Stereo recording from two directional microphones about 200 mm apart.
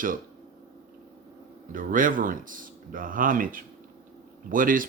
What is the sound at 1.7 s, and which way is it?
Speech, 40° right (ahead or behind).